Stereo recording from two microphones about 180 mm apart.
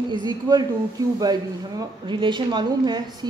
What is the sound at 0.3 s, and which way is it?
Speech, 20° right (ahead or behind).